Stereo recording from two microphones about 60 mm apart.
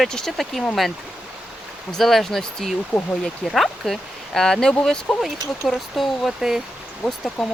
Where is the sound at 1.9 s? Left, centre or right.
Centre.